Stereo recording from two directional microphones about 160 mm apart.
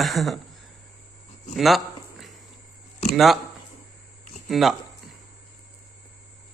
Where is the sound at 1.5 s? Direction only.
Centre (ahead or behind).